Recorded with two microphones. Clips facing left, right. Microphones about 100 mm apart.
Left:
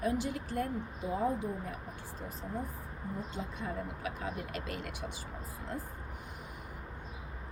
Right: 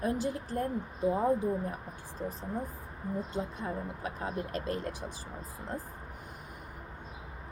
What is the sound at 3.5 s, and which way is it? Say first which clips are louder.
Speech: right 2 dB; 35° right (ahead or behind).